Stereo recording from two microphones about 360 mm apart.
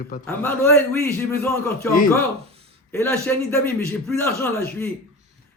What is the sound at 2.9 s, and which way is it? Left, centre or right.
Speech, centre.